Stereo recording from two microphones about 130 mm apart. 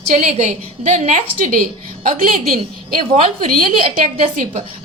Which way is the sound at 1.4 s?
90° right.